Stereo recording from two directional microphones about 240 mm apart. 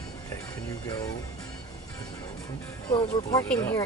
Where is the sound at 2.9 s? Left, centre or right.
Left.